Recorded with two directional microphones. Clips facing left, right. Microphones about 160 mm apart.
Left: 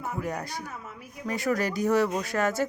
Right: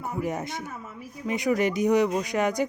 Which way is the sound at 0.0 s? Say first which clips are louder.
Right 3 dB; 15° right (ahead or behind).